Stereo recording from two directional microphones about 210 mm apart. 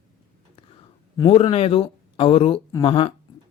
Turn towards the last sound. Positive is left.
turn(degrees=25)  # may be behind; listen again after turning